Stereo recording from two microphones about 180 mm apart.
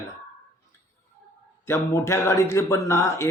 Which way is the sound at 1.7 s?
15° left (ahead or behind).